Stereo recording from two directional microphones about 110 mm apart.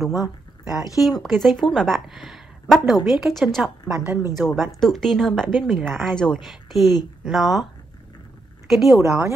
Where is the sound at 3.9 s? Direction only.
20° right (ahead or behind).